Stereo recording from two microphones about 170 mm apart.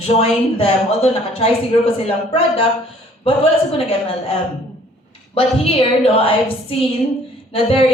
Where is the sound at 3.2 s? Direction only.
35° left (ahead or behind).